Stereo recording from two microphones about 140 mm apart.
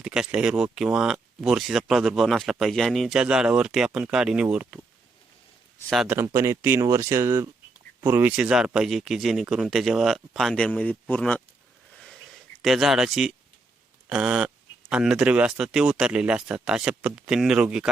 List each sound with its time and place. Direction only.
0.0 s speech: 5° right (ahead or behind)
6.1 s speech: 15° right (ahead or behind); by 11.4 s 10° left (ahead or behind)
12.6 s speech: centre (ahead or behind)